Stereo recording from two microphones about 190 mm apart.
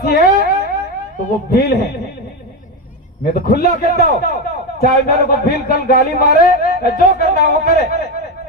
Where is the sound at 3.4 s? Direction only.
55° left (ahead or behind).